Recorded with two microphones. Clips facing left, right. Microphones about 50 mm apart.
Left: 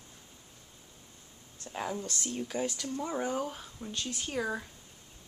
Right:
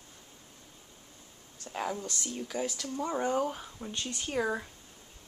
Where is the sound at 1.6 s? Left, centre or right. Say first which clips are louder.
Right 1 dB; centre.